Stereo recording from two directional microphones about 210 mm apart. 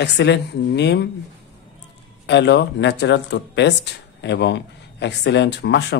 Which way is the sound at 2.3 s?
55° left (ahead or behind).